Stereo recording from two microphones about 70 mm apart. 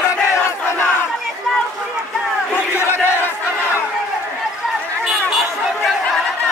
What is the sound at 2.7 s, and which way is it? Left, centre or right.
Battle cry, left.